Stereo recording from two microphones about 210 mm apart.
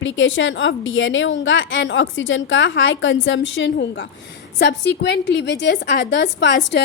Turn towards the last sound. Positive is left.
turn(degrees=60)  # may be behind; listen again after turning